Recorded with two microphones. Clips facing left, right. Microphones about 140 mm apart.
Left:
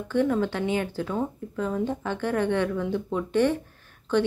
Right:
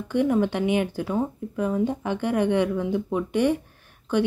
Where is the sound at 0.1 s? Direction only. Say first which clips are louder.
Right 2 dB; 15° right (ahead or behind).